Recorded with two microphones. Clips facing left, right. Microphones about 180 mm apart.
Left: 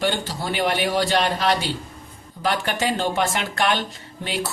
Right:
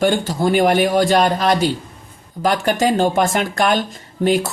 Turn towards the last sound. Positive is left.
turn(degrees=-45)  # may be behind; listen again after turning